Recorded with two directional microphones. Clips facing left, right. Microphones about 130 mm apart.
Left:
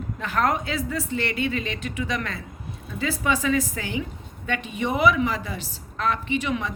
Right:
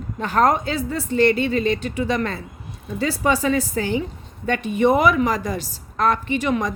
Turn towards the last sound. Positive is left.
turn(degrees=-40)  # may be behind; listen again after turning